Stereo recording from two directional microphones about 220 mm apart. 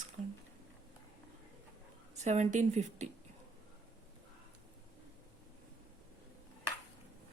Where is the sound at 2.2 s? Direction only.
30° right (ahead or behind).